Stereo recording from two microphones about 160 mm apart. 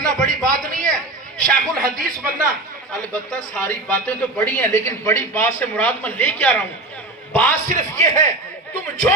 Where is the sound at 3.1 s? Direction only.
10° left (ahead or behind).